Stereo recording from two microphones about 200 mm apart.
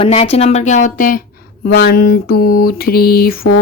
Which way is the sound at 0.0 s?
30° left (ahead or behind).